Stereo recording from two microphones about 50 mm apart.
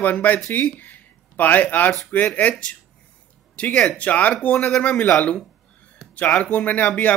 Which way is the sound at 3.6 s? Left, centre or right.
Left.